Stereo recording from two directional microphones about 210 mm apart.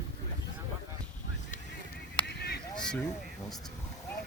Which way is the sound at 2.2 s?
50° left (ahead or behind).